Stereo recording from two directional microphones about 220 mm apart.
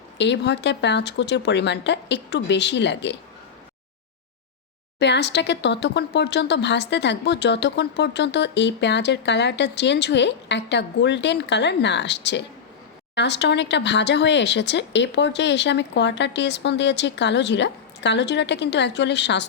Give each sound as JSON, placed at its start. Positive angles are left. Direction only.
{"t": 0.2, "sound": "speech", "side_deg": 50}
{"t": 4.9, "sound": "speech", "side_deg": 50}